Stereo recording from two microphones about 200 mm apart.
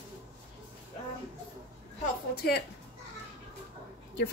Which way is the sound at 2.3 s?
50° left (ahead or behind).